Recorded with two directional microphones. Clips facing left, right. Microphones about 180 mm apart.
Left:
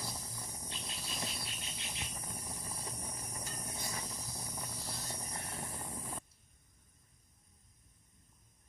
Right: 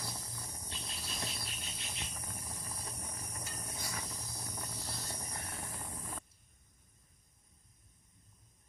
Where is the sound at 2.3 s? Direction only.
15° left (ahead or behind).